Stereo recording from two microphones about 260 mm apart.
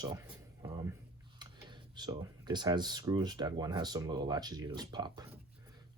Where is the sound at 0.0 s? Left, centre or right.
Centre.